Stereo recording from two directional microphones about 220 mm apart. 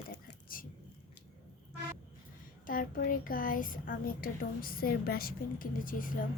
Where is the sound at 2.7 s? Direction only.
40° left (ahead or behind).